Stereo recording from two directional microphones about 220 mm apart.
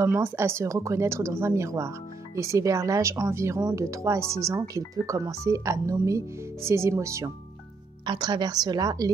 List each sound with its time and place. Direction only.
0.0 s speech: 10° right (ahead or behind)